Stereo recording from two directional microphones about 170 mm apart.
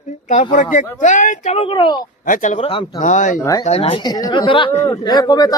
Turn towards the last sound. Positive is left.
turn(degrees=25)  # may be behind; listen again after turning